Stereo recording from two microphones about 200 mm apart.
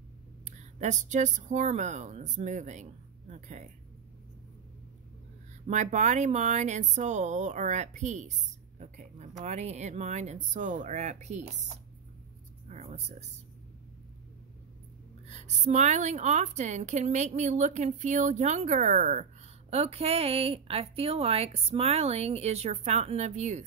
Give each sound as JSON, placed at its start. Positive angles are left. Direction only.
{"t": 0.5, "sound": "speech", "side_deg": -35}
{"t": 5.7, "sound": "a woman's voice", "side_deg": -35}
{"t": 12.6, "sound": "speech", "side_deg": -35}
{"t": 15.2, "sound": "a woman's voice", "side_deg": -35}